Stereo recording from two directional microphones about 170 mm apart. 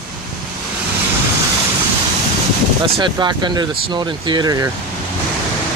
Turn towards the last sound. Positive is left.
turn(degrees=-25)  # may be behind; listen again after turning